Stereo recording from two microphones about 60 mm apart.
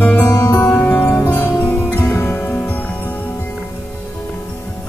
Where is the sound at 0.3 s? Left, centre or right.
Left.